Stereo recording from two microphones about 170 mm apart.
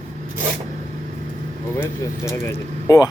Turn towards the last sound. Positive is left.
turn(degrees=20)  # may be behind; listen again after turning